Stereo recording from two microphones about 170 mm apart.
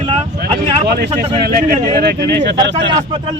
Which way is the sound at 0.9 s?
75° right (ahead or behind).